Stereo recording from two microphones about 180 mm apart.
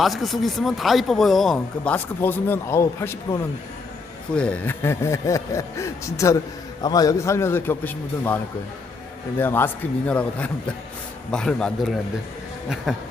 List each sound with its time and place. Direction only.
0.0 s speech: centre (ahead or behind)
9.4 s speech: 10° left (ahead or behind)